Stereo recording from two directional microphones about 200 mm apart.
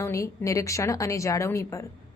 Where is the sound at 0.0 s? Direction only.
15° left (ahead or behind).